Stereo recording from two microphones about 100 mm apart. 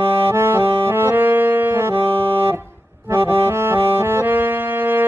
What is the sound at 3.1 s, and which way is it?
Accordion, 25° right (ahead or behind).